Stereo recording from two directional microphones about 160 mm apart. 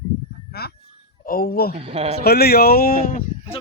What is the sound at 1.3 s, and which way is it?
Speech, 70° left (ahead or behind).